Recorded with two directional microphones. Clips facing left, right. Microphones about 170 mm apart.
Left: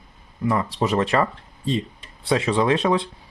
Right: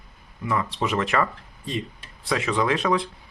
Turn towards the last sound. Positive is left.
turn(degrees=25)  # may be behind; listen again after turning